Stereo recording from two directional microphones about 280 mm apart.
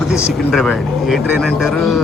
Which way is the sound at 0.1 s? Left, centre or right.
Centre.